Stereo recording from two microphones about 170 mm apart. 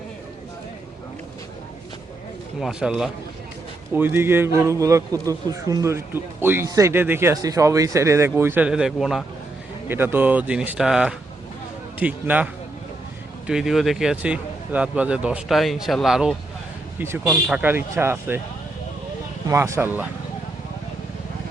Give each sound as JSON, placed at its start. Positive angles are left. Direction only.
{"t": 2.6, "sound": "a man's voice", "side_deg": -5}
{"t": 9.9, "sound": "a man's voice", "side_deg": -15}
{"t": 13.5, "sound": "a man's voice", "side_deg": 0}
{"t": 19.5, "sound": "a man's voice", "side_deg": -15}